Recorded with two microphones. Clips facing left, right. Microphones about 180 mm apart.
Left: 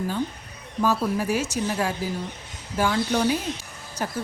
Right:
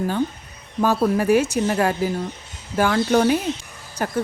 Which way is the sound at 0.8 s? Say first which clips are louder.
Right 4 dB; 60° right (ahead or behind).